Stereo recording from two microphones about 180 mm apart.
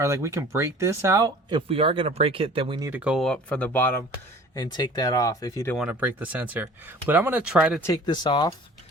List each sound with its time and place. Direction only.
0.0 s speech: 15° right (ahead or behind)
2.8 s speech: 10° right (ahead or behind); by 4.0 s 10° left (ahead or behind)
4.5 s speech: 25° left (ahead or behind)
5.7 s speech: 5° right (ahead or behind)
7.8 s speech: 20° left (ahead or behind)